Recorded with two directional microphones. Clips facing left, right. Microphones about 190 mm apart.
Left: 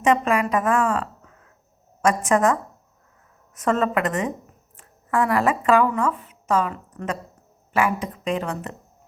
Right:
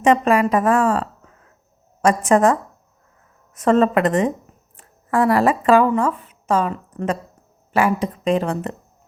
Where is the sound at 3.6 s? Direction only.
30° right (ahead or behind).